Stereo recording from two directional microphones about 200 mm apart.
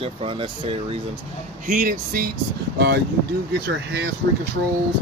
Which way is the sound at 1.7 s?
40° right (ahead or behind).